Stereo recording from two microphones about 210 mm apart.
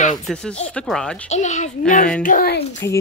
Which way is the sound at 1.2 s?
35° left (ahead or behind).